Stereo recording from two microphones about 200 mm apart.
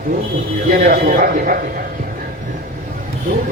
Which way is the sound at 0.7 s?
40° right (ahead or behind).